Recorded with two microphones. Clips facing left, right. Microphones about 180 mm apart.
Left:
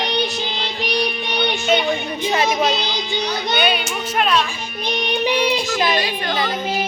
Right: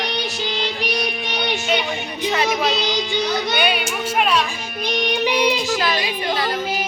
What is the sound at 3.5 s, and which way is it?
A child's voice, 10° right (ahead or behind).